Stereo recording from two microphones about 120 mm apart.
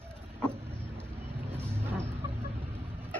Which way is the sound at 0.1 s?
10° left (ahead or behind).